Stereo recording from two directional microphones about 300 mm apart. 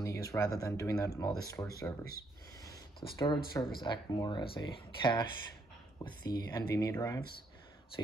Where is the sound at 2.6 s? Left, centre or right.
Centre.